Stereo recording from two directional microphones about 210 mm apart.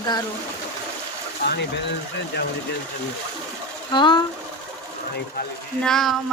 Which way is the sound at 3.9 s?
20° left (ahead or behind).